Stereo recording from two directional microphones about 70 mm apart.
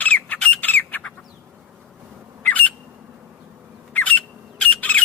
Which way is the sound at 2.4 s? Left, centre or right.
Left.